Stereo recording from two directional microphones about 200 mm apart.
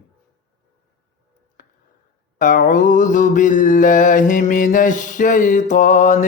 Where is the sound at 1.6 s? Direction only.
40° left (ahead or behind).